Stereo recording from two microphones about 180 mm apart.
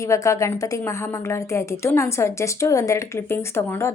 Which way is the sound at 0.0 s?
15° left (ahead or behind).